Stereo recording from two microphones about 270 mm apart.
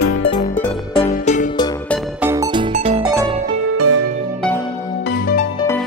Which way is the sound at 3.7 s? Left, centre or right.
Right.